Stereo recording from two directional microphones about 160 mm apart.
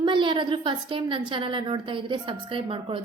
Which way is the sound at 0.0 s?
30° right (ahead or behind).